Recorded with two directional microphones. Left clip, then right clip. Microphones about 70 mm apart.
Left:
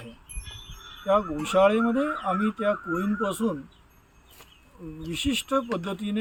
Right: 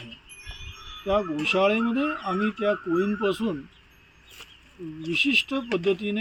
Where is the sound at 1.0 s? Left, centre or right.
Left.